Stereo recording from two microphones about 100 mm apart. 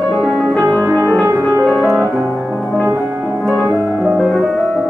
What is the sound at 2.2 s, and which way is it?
Music, 15° right (ahead or behind).